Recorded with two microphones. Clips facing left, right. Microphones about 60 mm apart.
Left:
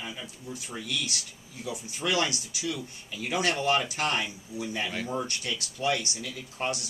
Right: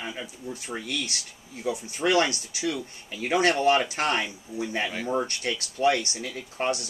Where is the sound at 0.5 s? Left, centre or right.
Right.